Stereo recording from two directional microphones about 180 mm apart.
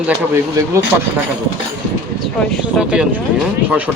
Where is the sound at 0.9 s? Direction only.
10° right (ahead or behind).